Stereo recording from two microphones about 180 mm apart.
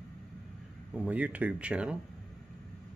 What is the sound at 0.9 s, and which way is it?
Speech, 10° right (ahead or behind).